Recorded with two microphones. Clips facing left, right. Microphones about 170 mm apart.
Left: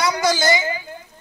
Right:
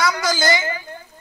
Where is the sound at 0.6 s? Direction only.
15° left (ahead or behind).